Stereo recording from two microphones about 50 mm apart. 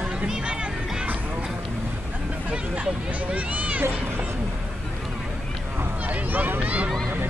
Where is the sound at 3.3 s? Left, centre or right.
Right.